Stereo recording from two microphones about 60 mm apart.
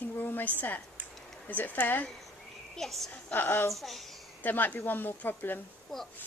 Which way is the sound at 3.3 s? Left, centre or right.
Left.